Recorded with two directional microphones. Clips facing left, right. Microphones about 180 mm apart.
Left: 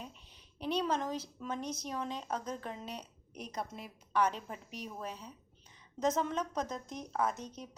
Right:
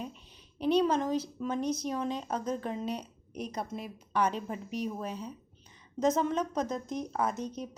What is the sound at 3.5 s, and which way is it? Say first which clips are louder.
Speech: right 2 dB; 25° right (ahead or behind).